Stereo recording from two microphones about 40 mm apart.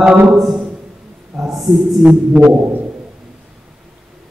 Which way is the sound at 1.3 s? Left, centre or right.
Centre.